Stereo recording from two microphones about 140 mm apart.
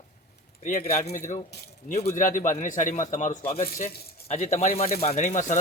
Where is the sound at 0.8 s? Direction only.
55° left (ahead or behind).